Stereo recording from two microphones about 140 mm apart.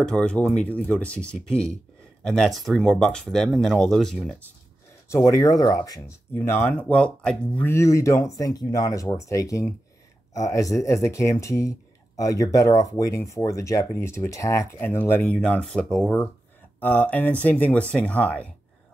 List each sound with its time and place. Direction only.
0.0 s speech: 5° left (ahead or behind)
5.1 s speech: 20° left (ahead or behind)